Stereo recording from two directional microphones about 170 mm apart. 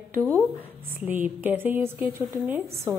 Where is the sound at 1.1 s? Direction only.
10° right (ahead or behind).